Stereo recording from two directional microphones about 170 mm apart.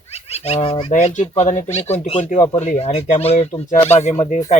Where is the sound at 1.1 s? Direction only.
45° left (ahead or behind).